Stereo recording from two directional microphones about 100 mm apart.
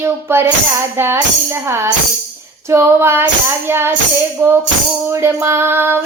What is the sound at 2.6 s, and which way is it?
Speech, 25° right (ahead or behind).